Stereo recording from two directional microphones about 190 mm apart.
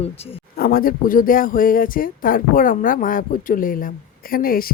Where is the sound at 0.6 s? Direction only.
50° left (ahead or behind).